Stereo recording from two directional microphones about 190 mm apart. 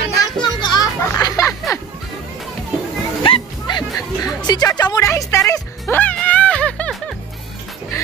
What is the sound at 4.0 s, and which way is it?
Speech, 20° left (ahead or behind).